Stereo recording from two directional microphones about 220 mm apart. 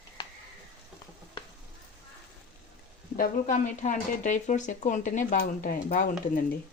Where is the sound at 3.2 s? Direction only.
35° left (ahead or behind).